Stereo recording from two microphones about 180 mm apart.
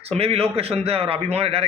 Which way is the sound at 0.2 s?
35° right (ahead or behind).